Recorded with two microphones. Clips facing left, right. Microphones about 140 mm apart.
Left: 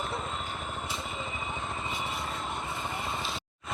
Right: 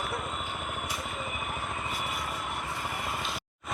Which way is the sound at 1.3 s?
25° left (ahead or behind).